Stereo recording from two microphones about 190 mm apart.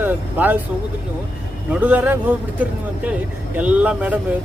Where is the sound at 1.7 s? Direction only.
5° right (ahead or behind).